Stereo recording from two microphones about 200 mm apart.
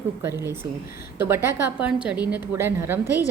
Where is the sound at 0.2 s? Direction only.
15° right (ahead or behind).